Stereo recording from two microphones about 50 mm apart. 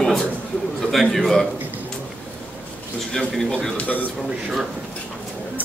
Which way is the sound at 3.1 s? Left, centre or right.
Centre.